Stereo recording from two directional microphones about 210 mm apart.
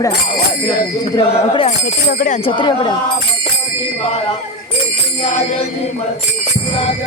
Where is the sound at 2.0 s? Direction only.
40° left (ahead or behind).